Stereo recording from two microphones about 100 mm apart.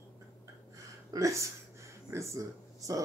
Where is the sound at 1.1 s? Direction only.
30° right (ahead or behind).